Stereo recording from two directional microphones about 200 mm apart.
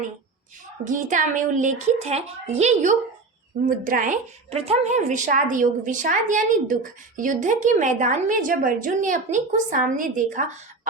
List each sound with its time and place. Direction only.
0.9 s a woman's voice: 40° right (ahead or behind)